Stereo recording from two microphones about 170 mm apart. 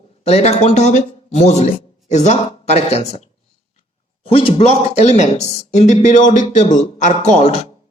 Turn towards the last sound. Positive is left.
turn(degrees=40)  # may be behind; listen again after turning